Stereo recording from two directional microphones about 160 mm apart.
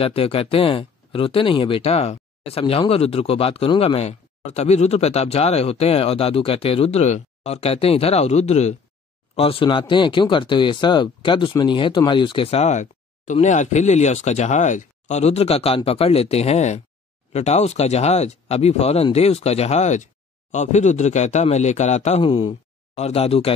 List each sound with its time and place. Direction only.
0.0 s speech: 35° left (ahead or behind)
22.2 s speech: 30° left (ahead or behind)